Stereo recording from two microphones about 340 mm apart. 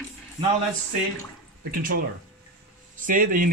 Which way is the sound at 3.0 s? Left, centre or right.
Right.